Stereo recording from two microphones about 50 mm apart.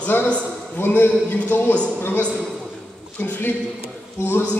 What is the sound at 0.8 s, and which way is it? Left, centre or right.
Speech, left.